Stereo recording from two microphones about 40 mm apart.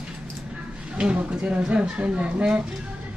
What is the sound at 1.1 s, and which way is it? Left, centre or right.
Speech, right.